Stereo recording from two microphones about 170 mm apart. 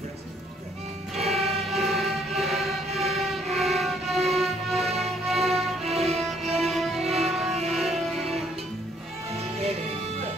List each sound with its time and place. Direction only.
1.1 s music: centre (ahead or behind)
5.9 s music: 40° right (ahead or behind)
6.6 s music: centre (ahead or behind)
7.0 s music: 35° right (ahead or behind)
7.2 s music: centre (ahead or behind)
9.3 s music: 35° right (ahead or behind)